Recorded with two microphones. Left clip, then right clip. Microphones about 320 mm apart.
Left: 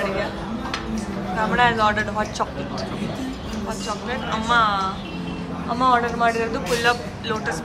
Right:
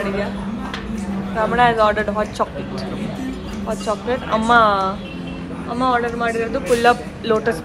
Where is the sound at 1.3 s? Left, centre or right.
Centre.